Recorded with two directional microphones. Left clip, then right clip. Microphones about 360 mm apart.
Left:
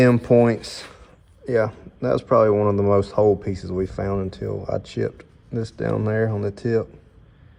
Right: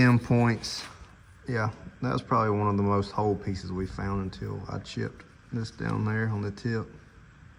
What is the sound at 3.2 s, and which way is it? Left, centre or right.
Speech, left.